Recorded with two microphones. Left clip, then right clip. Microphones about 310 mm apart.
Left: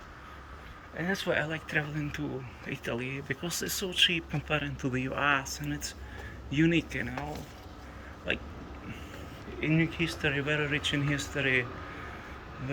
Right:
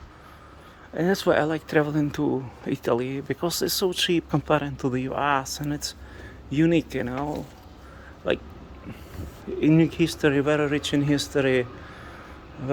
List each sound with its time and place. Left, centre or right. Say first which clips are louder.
0.9 s speech: right 9 dB; right
8.2 s speech: right 7 dB; centre
9.6 s speech: right 9 dB; right